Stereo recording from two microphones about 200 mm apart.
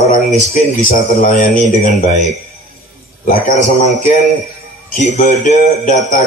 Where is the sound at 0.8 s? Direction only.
45° left (ahead or behind).